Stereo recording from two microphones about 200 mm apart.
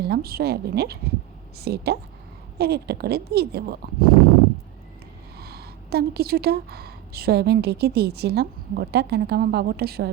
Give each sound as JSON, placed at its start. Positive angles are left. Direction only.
{"t": 0.1, "sound": "speech", "side_deg": -50}
{"t": 5.4, "sound": "speech", "side_deg": -50}